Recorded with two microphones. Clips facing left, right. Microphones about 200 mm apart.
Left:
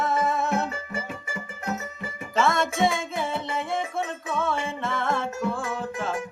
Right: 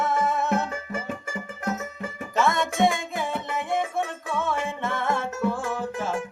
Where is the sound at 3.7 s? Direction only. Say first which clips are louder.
Right 2 dB; 20° right (ahead or behind).